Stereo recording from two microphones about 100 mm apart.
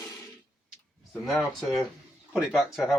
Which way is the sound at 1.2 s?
5° left (ahead or behind).